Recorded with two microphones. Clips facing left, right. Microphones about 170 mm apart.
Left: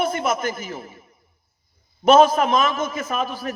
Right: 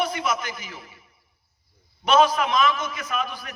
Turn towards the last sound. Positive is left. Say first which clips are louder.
# left 4 dB
turn(degrees=40)  # may be behind; listen again after turning